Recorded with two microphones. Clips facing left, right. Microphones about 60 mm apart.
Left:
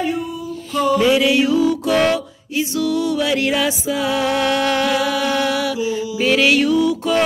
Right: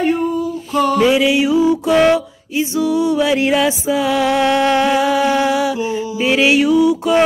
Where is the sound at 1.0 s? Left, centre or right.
Right.